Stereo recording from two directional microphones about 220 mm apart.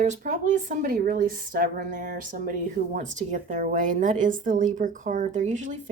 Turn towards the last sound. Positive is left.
turn(degrees=-35)  # may be behind; listen again after turning